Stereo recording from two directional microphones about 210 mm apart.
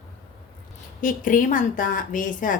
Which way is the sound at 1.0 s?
40° left (ahead or behind).